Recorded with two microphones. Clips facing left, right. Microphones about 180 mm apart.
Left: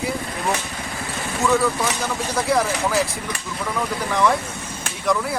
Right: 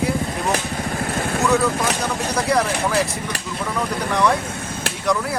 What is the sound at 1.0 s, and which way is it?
Vehicle, 55° right (ahead or behind).